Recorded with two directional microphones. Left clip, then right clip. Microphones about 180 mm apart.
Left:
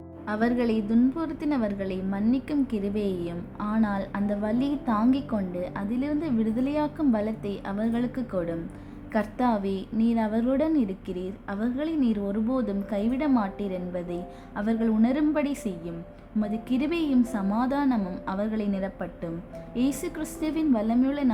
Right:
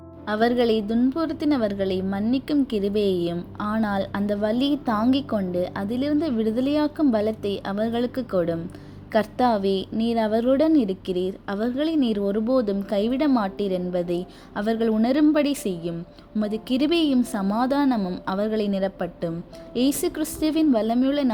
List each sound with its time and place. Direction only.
0.3 s a woman's voice: 25° right (ahead or behind)